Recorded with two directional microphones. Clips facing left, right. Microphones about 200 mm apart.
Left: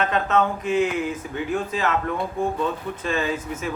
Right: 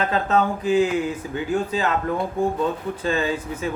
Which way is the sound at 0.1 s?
35° right (ahead or behind).